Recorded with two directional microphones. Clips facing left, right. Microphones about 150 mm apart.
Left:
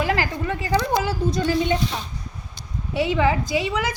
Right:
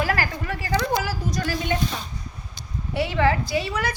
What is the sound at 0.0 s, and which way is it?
A woman's voice, 20° left (ahead or behind).